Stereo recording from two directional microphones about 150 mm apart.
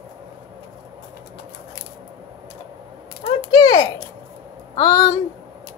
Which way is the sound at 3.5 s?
30° left (ahead or behind).